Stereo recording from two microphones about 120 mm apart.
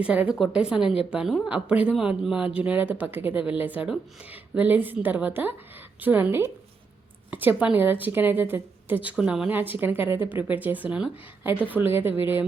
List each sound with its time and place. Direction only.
0.0 s a woman's voice: 10° right (ahead or behind)